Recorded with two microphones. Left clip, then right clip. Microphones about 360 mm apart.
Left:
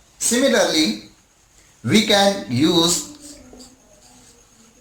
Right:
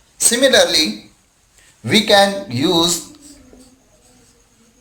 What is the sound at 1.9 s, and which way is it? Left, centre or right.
Speech, right.